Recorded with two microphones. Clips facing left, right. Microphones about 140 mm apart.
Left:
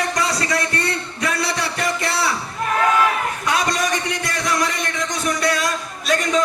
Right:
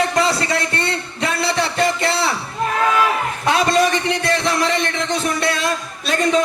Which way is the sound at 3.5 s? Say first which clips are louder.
Right 6 dB; 30° right (ahead or behind).